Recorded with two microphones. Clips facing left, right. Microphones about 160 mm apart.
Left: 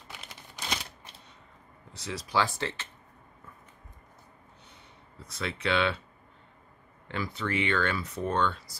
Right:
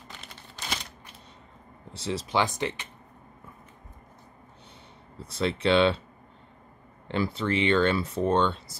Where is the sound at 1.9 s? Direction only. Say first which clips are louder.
Right 3 dB; 25° right (ahead or behind).